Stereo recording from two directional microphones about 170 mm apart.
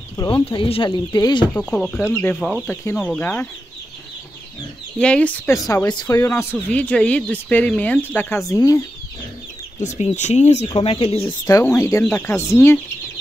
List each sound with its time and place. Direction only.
0.2 s speech: 30° left (ahead or behind)
1.5 s speech: 5° left (ahead or behind)
2.7 s speech: 15° left (ahead or behind)
4.9 s speech: 5° left (ahead or behind)
5.5 s speech: 20° left (ahead or behind)
9.8 s speech: 40° left (ahead or behind)
10.7 s speech: 30° left (ahead or behind)
11.6 s speech: 15° left (ahead or behind)